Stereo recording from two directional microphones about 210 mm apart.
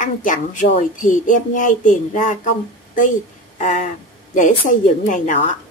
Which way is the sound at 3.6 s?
35° left (ahead or behind).